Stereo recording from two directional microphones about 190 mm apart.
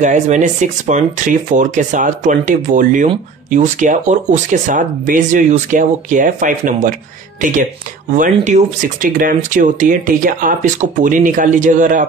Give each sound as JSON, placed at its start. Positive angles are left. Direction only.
{"t": 0.0, "sound": "speech", "side_deg": -40}